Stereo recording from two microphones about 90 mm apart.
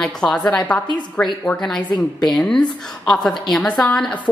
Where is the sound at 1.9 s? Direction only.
55° left (ahead or behind).